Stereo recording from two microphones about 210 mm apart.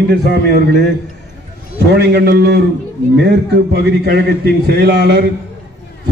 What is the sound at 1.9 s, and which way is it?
A man's voice, 55° right (ahead or behind).